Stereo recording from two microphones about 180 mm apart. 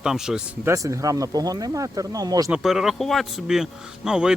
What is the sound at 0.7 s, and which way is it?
Speech, 15° right (ahead or behind).